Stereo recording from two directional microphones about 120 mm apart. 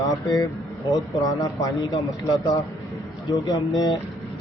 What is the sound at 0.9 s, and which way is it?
A man's voice, 30° left (ahead or behind).